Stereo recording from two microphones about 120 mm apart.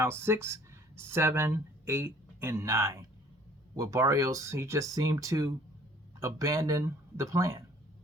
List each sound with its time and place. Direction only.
0.0 s speech: 20° right (ahead or behind)